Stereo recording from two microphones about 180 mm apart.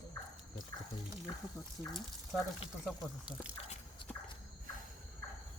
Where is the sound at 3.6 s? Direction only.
35° left (ahead or behind).